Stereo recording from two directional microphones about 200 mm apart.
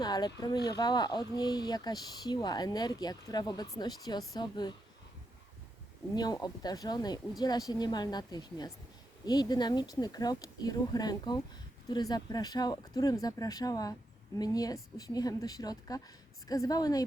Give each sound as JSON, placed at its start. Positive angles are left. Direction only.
{"t": 0.0, "sound": "speech", "side_deg": 20}
{"t": 6.1, "sound": "speech", "side_deg": 20}